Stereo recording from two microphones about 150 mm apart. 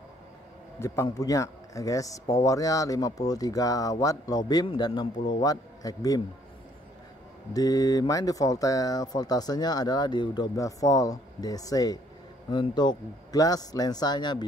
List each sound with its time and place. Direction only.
0.7 s a man's voice: 15° left (ahead or behind)
7.5 s speech: 25° left (ahead or behind)